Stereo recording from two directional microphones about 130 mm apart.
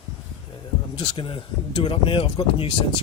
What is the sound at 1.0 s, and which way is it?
Speech, 40° left (ahead or behind).